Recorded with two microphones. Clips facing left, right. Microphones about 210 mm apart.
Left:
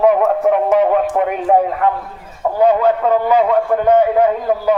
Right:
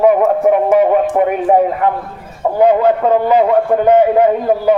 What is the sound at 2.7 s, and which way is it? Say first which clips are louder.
A man's voice: right 2 dB; 20° right (ahead or behind).